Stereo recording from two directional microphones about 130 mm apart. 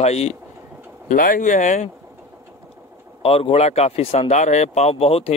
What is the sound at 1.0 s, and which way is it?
Speech, 90° left.